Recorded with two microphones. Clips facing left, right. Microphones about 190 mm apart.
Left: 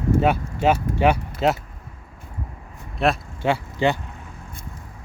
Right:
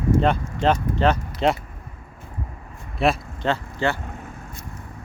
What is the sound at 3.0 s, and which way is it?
Speech, centre (ahead or behind).